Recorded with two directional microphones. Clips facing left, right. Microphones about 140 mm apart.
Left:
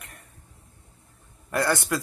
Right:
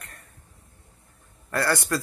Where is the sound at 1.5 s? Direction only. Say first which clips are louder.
Left 1 dB; 20° left (ahead or behind).